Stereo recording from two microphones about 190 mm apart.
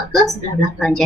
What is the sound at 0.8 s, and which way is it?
Speech, 5° left (ahead or behind).